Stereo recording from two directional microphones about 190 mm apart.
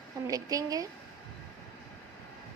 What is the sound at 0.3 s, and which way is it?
Speech, 20° right (ahead or behind).